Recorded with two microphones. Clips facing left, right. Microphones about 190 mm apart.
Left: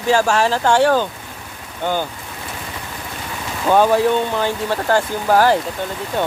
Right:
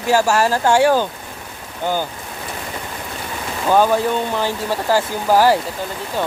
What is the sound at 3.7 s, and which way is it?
Speech, centre (ahead or behind).